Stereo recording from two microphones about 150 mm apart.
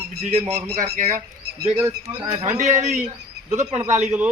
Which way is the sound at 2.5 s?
50° right (ahead or behind).